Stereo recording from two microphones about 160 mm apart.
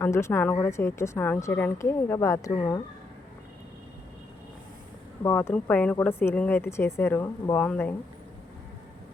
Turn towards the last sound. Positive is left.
turn(degrees=10)  # may be behind; listen again after turning